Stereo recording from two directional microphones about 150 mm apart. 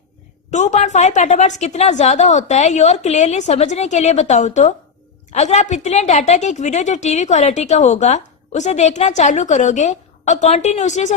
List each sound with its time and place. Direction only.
0.5 s a woman's voice: 50° left (ahead or behind)